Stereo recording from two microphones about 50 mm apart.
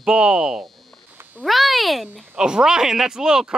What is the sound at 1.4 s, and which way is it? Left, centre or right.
Speech, centre.